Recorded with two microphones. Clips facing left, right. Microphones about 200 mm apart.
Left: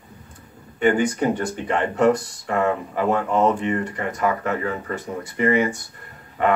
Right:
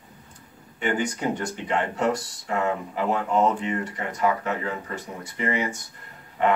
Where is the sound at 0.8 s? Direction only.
55° left (ahead or behind).